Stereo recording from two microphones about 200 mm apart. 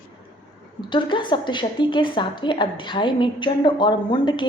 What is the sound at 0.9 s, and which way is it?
A woman's voice, 25° left (ahead or behind).